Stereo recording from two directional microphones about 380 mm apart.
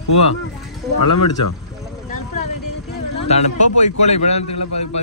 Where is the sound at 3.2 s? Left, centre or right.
Centre.